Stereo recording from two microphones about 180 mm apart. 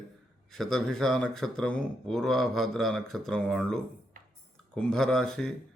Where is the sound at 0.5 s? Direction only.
Centre (ahead or behind).